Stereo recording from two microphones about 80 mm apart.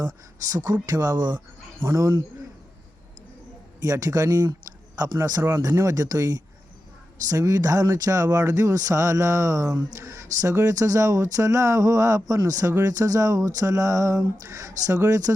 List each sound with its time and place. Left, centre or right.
0.5 s speech: right
1.8 s speech: right
3.8 s speech: right